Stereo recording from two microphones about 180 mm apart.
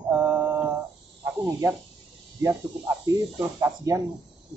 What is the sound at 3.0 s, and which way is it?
Speech, 20° right (ahead or behind).